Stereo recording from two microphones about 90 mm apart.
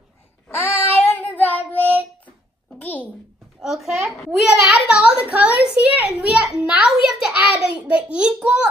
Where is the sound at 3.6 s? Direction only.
5° right (ahead or behind).